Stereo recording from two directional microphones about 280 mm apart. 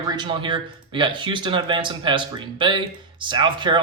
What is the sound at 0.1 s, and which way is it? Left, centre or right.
Speech, centre.